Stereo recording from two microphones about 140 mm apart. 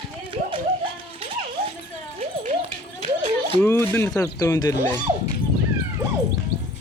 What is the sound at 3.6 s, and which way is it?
Speech, 15° left (ahead or behind).